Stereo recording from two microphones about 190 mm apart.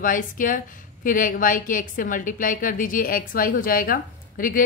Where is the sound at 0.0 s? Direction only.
45° left (ahead or behind).